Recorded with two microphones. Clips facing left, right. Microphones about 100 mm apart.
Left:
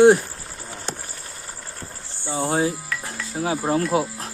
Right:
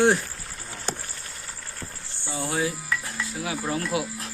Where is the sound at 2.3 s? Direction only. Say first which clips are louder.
Left 5 dB; 30° left (ahead or behind).